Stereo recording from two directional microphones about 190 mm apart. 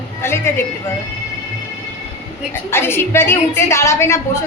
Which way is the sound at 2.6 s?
10° left (ahead or behind).